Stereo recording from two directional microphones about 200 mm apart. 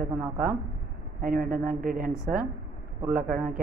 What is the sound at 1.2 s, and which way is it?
Speech, 40° right (ahead or behind).